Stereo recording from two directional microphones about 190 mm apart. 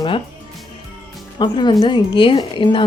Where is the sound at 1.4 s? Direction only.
25° left (ahead or behind).